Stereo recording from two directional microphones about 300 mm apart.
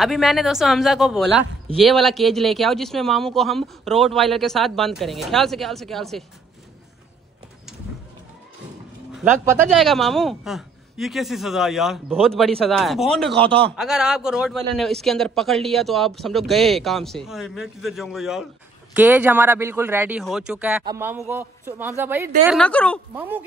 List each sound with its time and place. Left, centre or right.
0.0 s speech: centre
9.1 s speech: centre
13.3 s a man's voice: centre
13.7 s a man's voice: centre